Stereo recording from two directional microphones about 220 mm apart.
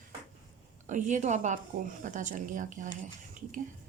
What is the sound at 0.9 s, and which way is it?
A woman's voice, 35° right (ahead or behind).